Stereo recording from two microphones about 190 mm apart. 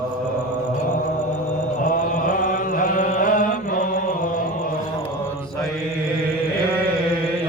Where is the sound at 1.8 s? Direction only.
45° left (ahead or behind).